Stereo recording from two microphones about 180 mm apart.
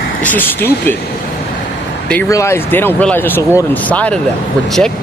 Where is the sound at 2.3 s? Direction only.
15° left (ahead or behind).